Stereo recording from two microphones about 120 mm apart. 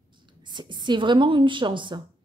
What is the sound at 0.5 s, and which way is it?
A woman's voice, 40° right (ahead or behind).